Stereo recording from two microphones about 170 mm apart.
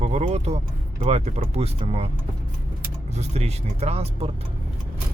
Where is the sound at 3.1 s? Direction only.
40° right (ahead or behind).